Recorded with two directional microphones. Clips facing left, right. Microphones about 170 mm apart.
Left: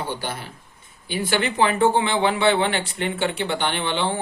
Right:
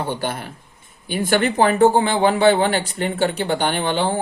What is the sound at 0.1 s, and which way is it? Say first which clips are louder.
Speech: right 4 dB; 55° right (ahead or behind).